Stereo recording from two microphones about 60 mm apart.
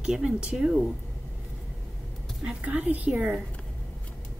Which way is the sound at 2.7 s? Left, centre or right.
Right.